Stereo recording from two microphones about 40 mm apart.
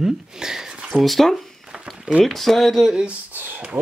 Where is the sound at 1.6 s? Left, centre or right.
Centre.